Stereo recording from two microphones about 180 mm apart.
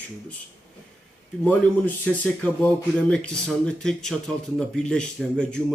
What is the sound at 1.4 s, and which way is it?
A man's voice, 10° left (ahead or behind).